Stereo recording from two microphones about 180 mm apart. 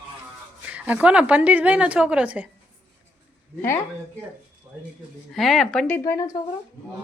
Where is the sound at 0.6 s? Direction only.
10° right (ahead or behind).